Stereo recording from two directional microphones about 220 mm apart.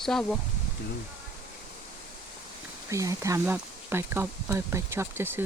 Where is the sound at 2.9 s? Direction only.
15° right (ahead or behind).